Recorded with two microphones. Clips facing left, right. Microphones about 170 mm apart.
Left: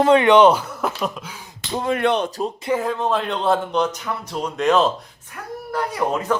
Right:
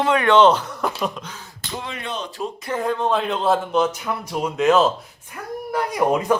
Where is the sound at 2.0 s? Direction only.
65° left (ahead or behind).